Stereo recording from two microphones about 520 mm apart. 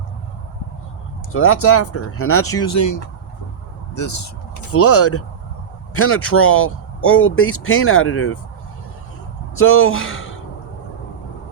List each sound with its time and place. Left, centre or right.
1.3 s speech: left
9.6 s speech: left